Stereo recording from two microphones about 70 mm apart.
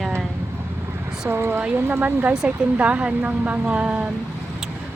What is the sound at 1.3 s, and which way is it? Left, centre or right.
Speech, right.